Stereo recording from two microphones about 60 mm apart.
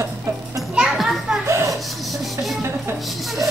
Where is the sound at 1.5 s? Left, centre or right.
Right.